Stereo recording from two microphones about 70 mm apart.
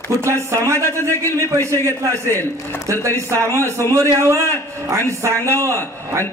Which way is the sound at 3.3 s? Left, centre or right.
Right.